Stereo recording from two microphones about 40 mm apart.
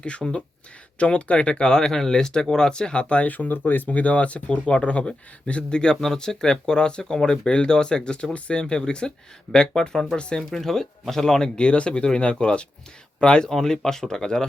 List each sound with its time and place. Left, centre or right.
0.0 s speech: left
3.2 s speech: left; by 10.2 s centre
10.2 s speech: left
10.5 s speech: centre
13.5 s speech: centre